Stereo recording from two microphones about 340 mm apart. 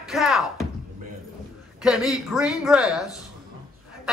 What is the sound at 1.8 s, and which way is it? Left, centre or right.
A man's voice, centre.